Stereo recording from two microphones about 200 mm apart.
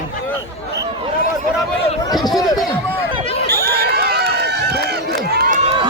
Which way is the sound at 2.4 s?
20° left (ahead or behind).